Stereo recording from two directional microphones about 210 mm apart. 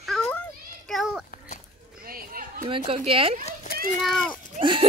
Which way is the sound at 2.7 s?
25° right (ahead or behind).